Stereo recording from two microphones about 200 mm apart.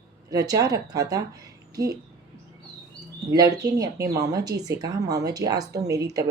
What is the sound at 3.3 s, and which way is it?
Speech, 15° right (ahead or behind).